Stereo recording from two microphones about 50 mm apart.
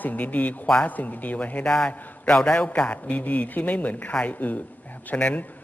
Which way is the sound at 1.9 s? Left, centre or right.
Left.